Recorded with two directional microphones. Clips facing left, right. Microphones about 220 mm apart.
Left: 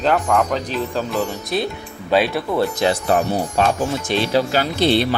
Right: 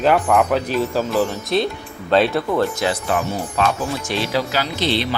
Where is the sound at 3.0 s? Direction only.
40° left (ahead or behind).